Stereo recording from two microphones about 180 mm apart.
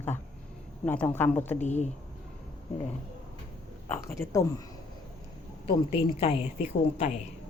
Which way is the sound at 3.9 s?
15° left (ahead or behind).